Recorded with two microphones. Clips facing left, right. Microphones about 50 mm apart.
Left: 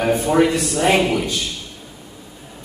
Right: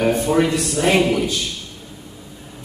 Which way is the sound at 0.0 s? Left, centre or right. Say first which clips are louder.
Left 1 dB; centre.